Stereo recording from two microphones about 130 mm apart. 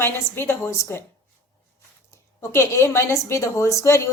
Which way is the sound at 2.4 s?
20° left (ahead or behind).